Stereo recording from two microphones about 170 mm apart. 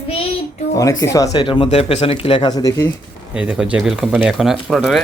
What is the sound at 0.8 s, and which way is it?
Speech, 20° left (ahead or behind).